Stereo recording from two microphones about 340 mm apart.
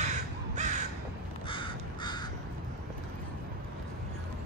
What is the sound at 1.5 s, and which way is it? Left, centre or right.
Crow, centre.